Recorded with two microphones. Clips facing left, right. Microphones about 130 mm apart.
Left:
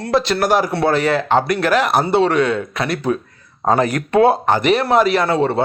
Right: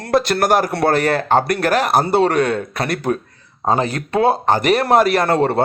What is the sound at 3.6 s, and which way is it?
Speech, 25° right (ahead or behind).